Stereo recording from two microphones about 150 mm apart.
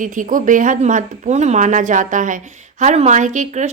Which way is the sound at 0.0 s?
60° right (ahead or behind).